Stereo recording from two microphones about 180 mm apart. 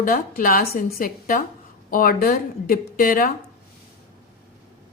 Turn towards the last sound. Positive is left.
turn(degrees=50)  # may be behind; listen again after turning